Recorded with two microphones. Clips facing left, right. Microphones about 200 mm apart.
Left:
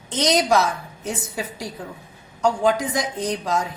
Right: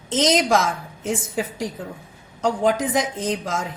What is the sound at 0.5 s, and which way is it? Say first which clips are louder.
Speech: even; 90° right.